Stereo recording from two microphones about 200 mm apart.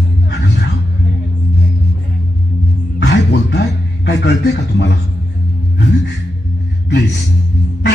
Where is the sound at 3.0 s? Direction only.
60° left (ahead or behind).